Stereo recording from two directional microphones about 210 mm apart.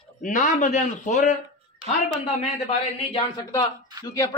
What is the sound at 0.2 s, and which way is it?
A man's voice, 35° left (ahead or behind).